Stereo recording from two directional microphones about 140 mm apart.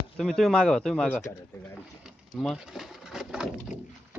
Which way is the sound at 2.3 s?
5° right (ahead or behind).